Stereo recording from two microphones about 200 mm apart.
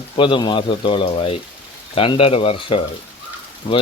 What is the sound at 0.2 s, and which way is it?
Speech, 25° left (ahead or behind).